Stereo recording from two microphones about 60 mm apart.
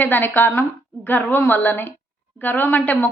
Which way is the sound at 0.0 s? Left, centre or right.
Left.